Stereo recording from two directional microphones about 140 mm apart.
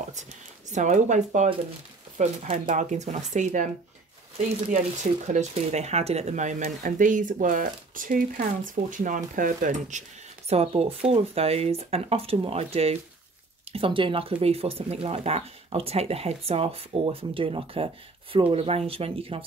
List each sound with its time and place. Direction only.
0.1 s speech: 60° right (ahead or behind)
4.6 s speech: 75° right (ahead or behind); by 10.0 s 60° right (ahead or behind)
10.5 s speech: 45° right (ahead or behind)